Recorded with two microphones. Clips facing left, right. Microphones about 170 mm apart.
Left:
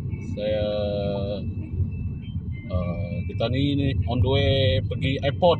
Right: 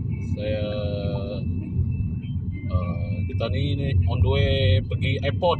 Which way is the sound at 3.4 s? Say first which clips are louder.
Left 6 dB; 20° left (ahead or behind).